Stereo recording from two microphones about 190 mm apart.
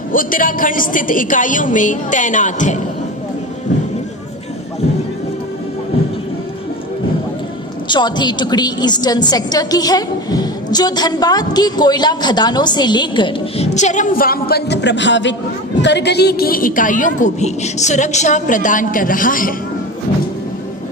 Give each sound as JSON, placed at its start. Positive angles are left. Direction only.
{"t": 0.1, "sound": "a woman's voice", "side_deg": 45}
{"t": 7.9, "sound": "a woman's voice", "side_deg": 25}
{"t": 13.7, "sound": "a man's voice", "side_deg": 40}